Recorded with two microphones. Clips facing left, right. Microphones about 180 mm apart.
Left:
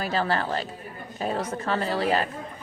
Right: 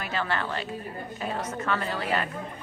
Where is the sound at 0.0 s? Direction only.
35° left (ahead or behind).